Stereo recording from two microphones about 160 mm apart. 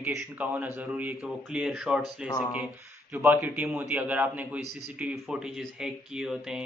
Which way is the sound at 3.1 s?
10° right (ahead or behind).